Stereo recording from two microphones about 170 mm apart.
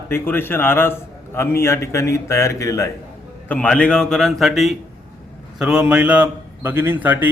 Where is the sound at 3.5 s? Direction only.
5° left (ahead or behind).